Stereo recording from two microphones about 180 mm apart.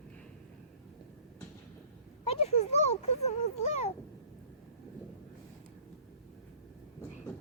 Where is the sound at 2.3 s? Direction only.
35° left (ahead or behind).